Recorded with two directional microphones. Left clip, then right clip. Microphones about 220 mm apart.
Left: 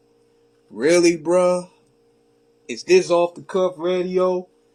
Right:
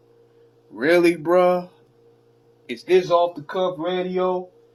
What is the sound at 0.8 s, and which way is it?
Speech, 35° left (ahead or behind).